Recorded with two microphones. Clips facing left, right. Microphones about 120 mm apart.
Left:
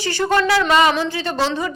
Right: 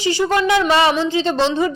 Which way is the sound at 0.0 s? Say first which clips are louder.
Right 1 dB; 15° right (ahead or behind).